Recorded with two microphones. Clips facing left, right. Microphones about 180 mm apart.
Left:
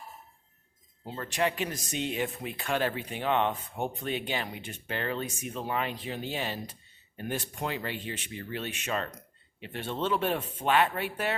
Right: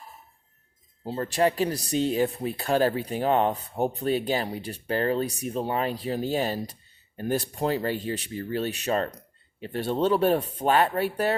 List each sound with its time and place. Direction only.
1.0 s speech: 35° right (ahead or behind)